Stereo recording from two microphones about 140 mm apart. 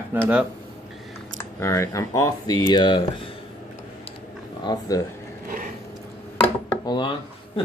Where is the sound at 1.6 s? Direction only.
20° left (ahead or behind).